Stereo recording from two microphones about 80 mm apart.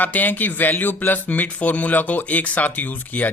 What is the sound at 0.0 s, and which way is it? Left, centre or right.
Speech, left.